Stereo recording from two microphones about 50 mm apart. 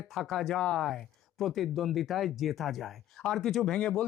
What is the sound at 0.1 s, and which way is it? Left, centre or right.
Speech, centre.